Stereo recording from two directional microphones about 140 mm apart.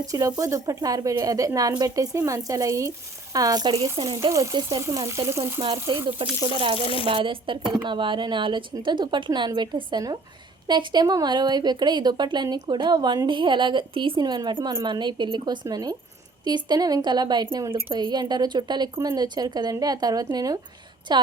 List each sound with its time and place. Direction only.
0.0 s a woman's voice: 25° right (ahead or behind)
4.3 s a woman's voice: 25° right (ahead or behind)
5.9 s speech: 35° right (ahead or behind)
6.7 s speech: 40° left (ahead or behind)
7.1 s a woman's voice: 35° right (ahead or behind)